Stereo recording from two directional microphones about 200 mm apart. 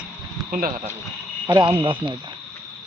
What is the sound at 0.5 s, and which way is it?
Speech, 45° right (ahead or behind).